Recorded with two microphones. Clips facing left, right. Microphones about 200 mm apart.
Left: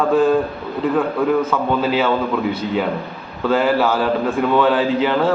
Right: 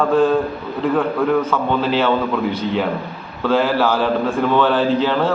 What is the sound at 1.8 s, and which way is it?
Speech, 5° left (ahead or behind).